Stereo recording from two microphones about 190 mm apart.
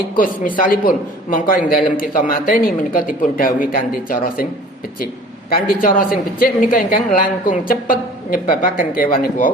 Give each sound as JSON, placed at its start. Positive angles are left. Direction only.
{"t": 0.2, "sound": "a man's voice", "side_deg": 45}
{"t": 5.5, "sound": "a man's voice", "side_deg": 50}